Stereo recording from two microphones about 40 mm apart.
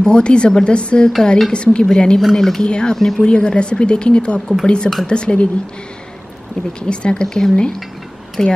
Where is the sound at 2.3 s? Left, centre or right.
Centre.